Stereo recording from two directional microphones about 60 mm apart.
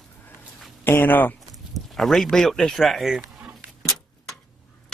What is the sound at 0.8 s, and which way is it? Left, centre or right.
Speech, left.